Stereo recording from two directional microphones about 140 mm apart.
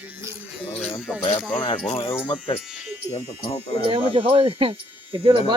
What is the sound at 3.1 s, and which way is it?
Speech, 40° left (ahead or behind).